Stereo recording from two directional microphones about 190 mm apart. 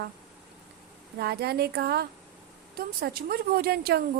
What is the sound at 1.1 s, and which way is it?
A woman's voice, 55° right (ahead or behind).